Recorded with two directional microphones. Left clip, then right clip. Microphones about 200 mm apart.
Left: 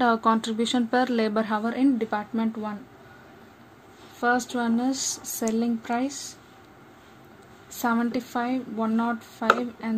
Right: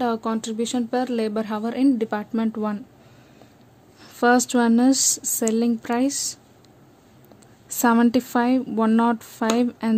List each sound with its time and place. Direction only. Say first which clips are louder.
0.0 s a woman's voice: left 3 dB; 35° right (ahead or behind); by 2.8 s 60° right (ahead or behind)
4.2 s speech: right 6 dB; 70° right (ahead or behind)
7.7 s a woman's voice: right 7 dB; 60° right (ahead or behind)